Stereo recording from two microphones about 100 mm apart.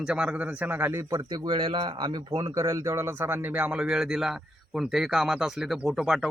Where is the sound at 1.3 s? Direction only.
45° right (ahead or behind); by 6.3 s centre (ahead or behind).